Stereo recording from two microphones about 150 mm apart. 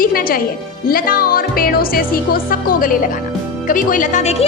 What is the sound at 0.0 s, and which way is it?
Music, 70° left (ahead or behind).